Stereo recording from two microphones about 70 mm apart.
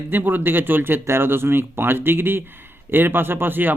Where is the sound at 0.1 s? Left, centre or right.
Right.